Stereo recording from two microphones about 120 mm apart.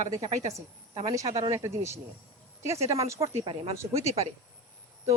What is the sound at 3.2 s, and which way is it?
Speech, 50° right (ahead or behind).